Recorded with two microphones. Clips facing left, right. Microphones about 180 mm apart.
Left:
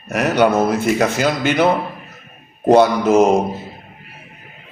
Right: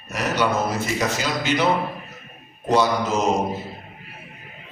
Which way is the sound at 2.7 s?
55° left (ahead or behind).